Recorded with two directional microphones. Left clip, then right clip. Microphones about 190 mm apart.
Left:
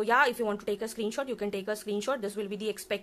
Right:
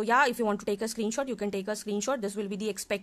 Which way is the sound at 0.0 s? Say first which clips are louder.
Even; 30° right (ahead or behind).